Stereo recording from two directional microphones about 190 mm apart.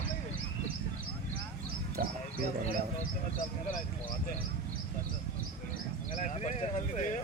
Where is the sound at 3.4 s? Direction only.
40° left (ahead or behind).